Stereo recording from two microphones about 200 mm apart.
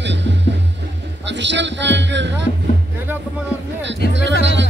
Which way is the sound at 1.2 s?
60° right (ahead or behind).